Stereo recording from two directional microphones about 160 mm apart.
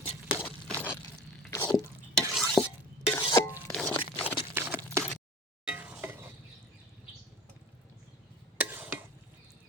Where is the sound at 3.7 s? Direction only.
5° left (ahead or behind).